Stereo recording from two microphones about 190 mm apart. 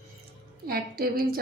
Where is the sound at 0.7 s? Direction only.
50° right (ahead or behind).